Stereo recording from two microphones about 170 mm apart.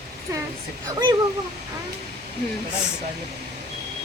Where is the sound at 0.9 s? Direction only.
25° right (ahead or behind).